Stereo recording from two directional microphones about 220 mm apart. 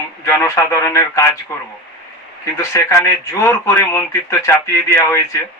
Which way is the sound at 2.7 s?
15° left (ahead or behind).